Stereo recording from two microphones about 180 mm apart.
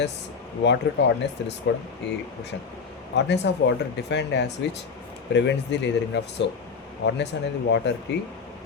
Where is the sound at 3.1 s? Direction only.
75° left (ahead or behind).